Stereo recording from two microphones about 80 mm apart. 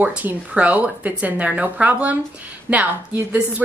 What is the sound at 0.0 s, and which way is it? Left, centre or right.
A woman's voice, centre.